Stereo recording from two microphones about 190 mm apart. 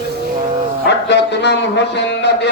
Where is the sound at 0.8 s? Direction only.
65° left (ahead or behind).